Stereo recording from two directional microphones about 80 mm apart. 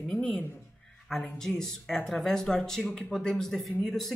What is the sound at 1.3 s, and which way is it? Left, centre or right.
Speech, centre.